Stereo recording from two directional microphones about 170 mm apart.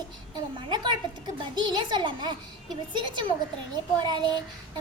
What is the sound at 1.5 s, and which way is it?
Speech, 25° right (ahead or behind).